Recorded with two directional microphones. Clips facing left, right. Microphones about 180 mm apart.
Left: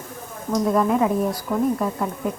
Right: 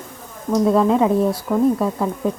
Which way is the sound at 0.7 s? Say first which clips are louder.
Right 2 dB; 25° right (ahead or behind).